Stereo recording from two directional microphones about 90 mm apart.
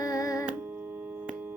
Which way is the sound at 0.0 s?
40° left (ahead or behind).